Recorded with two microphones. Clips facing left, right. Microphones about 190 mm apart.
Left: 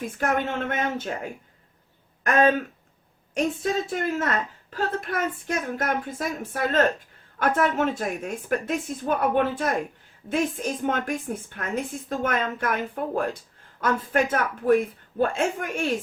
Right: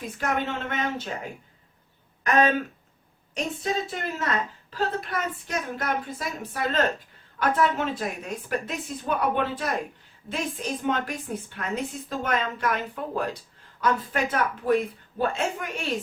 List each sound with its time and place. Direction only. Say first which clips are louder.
0.0 s a woman's voice: left 3 dB; 50° left (ahead or behind)
3.3 s a woman's voice: left 4 dB; 50° left (ahead or behind)
13.8 s a woman's voice: left 2 dB; 50° left (ahead or behind)